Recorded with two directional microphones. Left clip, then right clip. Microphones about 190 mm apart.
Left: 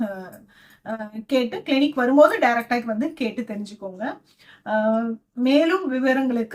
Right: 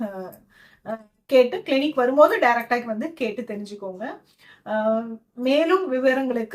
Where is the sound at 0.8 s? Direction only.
5° left (ahead or behind).